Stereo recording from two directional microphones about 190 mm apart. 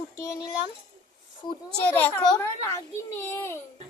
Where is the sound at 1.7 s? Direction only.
10° left (ahead or behind).